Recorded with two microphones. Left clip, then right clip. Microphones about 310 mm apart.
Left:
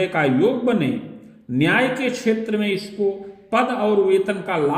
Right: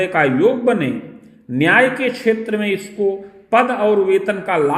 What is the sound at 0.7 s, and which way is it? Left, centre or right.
Speech, right.